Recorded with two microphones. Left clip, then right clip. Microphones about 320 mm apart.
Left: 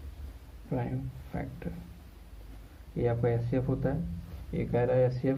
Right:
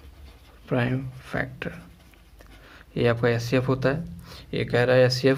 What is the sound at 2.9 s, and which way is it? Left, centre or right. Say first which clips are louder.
Speech: right 7 dB; right.